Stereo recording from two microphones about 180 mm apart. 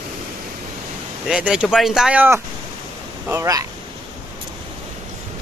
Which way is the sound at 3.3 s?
20° right (ahead or behind).